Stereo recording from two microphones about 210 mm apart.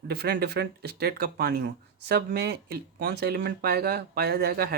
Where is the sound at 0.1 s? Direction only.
50° right (ahead or behind).